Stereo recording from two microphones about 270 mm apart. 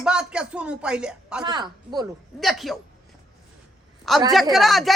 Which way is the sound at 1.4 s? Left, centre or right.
Centre.